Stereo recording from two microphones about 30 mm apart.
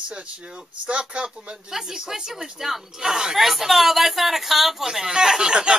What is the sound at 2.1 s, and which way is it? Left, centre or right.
Speech, centre.